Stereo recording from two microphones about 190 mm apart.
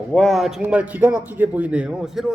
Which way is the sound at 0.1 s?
Centre (ahead or behind).